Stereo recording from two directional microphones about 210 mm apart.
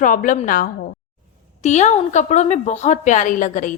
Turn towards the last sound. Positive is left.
turn(degrees=35)  # may be behind; listen again after turning